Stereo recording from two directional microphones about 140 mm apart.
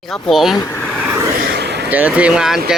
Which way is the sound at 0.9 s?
10° right (ahead or behind).